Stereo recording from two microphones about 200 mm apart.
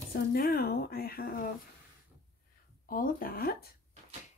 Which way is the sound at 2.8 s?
45° left (ahead or behind).